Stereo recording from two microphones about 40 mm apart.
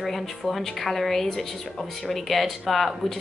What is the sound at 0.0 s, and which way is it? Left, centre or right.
Speech, centre.